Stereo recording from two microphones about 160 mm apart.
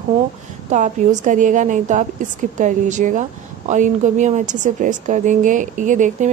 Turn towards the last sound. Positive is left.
turn(degrees=-50)  # may be behind; listen again after turning